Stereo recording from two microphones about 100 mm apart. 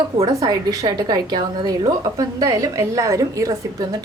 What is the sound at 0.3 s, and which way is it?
A woman's voice, 35° right (ahead or behind).